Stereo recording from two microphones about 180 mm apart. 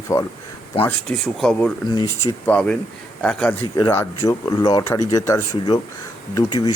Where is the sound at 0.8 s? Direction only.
10° left (ahead or behind).